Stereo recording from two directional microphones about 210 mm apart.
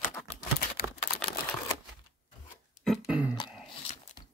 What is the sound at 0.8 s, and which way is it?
Typing, 45° left (ahead or behind).